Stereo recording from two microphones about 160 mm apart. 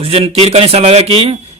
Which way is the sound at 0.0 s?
35° right (ahead or behind).